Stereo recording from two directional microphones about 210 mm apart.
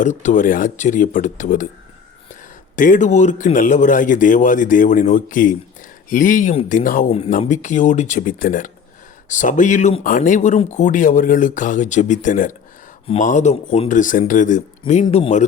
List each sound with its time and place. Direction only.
0.0 s speech: 35° left (ahead or behind)
2.7 s speech: 40° left (ahead or behind)